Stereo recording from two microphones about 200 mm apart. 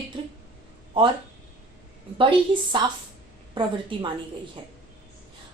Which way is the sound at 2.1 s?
25° right (ahead or behind).